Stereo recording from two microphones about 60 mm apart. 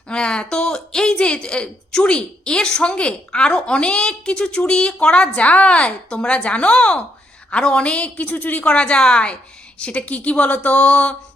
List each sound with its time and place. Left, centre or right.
0.1 s a woman's voice: centre